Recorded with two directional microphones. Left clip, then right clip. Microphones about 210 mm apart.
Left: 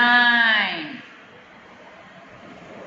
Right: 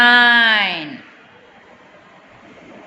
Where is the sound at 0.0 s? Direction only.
50° right (ahead or behind).